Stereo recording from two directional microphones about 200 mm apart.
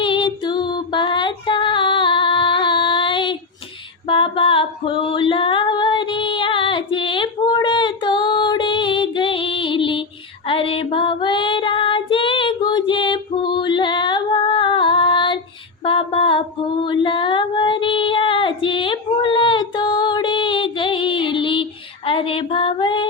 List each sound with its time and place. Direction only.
0.0 s female singing: 25° left (ahead or behind)
15.8 s mantra: 25° left (ahead or behind)
16.8 s female singing: 25° left (ahead or behind)